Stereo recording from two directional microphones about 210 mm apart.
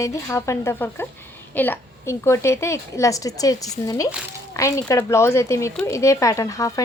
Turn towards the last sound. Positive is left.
turn(degrees=15)  # may be behind; listen again after turning